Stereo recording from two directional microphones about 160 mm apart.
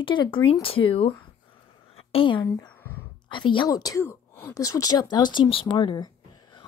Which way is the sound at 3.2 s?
30° left (ahead or behind).